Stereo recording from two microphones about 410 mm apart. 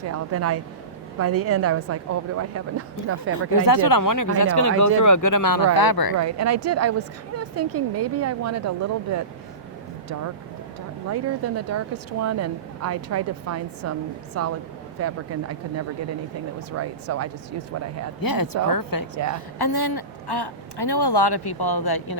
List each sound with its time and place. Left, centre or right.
0.1 s a woman's voice: right
3.5 s speech: left
6.1 s a woman's voice: right
11.1 s a woman's voice: right
16.7 s a woman's voice: right
18.2 s speech: left